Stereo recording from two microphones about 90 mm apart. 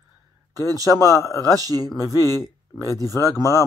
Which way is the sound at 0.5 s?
40° right (ahead or behind).